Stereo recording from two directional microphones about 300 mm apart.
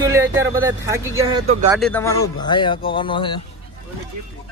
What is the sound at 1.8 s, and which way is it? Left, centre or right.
Speech, centre.